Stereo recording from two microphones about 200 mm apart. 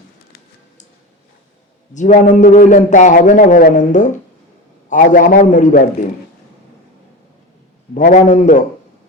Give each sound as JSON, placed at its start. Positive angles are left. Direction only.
{"t": 1.9, "sound": "a man's voice", "side_deg": 40}
{"t": 7.9, "sound": "a man's voice", "side_deg": 40}